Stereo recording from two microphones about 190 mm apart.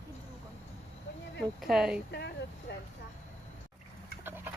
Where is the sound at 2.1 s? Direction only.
60° left (ahead or behind).